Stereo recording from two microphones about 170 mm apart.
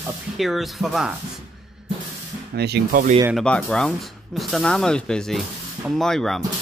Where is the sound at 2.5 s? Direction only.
75° right (ahead or behind); by 3.2 s 55° right (ahead or behind).